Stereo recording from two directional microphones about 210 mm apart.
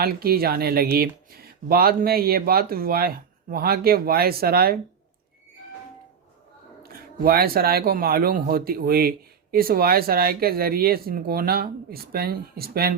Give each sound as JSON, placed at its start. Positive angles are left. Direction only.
{"t": 0.0, "sound": "speech", "side_deg": -45}
{"t": 6.8, "sound": "speech", "side_deg": -45}